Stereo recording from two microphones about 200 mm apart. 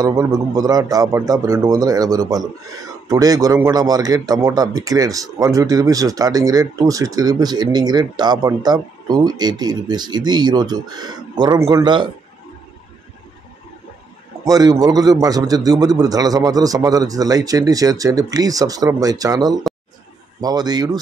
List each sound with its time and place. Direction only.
0.0 s a man's voice: 20° right (ahead or behind)
14.4 s a man's voice: 20° right (ahead or behind)